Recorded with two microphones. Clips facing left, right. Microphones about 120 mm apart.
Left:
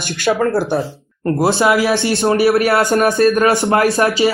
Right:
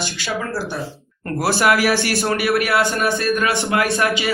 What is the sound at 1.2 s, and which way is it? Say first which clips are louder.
Speech: left 4 dB; 25° left (ahead or behind).